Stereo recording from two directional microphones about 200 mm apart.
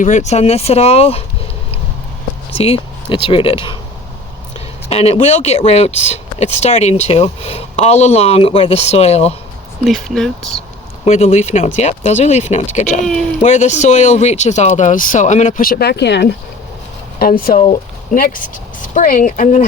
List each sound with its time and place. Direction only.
0.0 s speech: 35° left (ahead or behind)
2.6 s speech: 30° left (ahead or behind)
4.9 s speech: 30° left (ahead or behind)
9.8 s speech: centre (ahead or behind)
11.0 s speech: 35° left (ahead or behind); by 16.3 s 55° left (ahead or behind)
17.2 s speech: 45° left (ahead or behind)